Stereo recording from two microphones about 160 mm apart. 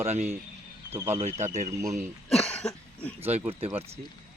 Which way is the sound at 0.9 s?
15° right (ahead or behind).